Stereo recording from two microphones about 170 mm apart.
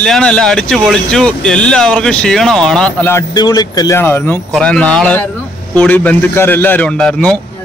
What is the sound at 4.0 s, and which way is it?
A man's voice, 10° left (ahead or behind).